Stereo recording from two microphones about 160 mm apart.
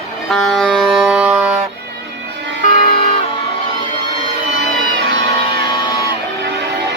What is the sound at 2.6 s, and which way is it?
Vehicle, 45° left (ahead or behind).